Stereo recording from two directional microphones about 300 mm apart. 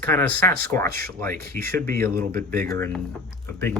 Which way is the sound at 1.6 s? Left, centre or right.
Right.